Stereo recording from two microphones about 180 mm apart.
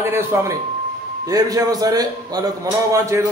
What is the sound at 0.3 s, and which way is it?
A man's voice, 15° right (ahead or behind).